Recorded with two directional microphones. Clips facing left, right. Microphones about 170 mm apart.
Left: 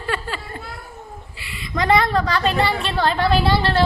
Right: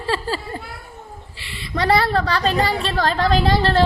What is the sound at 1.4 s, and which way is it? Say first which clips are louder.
A woman's voice: right 1 dB; 30° right (ahead or behind).